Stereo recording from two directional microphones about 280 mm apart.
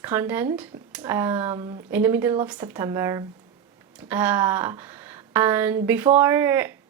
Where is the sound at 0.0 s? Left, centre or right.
Centre.